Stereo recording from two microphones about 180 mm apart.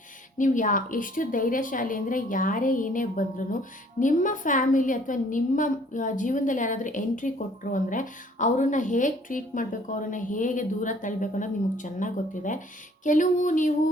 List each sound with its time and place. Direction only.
0.3 s a woman's voice: 45° left (ahead or behind)